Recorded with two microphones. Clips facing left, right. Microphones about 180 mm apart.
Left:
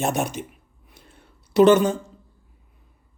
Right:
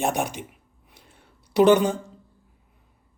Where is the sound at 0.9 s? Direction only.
15° right (ahead or behind).